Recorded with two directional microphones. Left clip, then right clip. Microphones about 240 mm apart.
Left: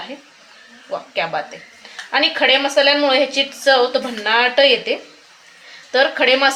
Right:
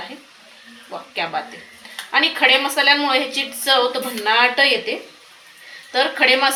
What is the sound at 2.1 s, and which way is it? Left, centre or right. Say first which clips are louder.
A woman's voice: even; left.